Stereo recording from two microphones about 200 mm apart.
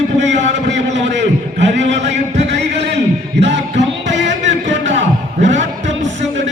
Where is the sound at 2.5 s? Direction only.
60° right (ahead or behind).